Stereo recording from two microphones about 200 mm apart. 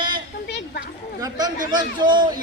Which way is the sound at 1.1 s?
20° right (ahead or behind).